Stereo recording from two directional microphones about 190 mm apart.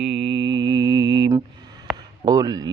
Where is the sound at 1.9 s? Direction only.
20° right (ahead or behind).